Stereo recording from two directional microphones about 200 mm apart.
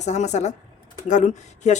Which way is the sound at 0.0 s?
35° left (ahead or behind).